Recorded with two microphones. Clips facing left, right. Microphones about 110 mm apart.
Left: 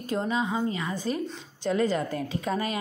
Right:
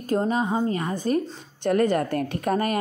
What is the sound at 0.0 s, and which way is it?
A woman's voice, 45° right (ahead or behind).